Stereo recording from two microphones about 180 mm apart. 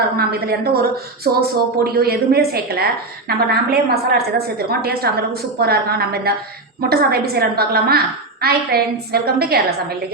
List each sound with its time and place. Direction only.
0.2 s a woman's voice: 60° right (ahead or behind)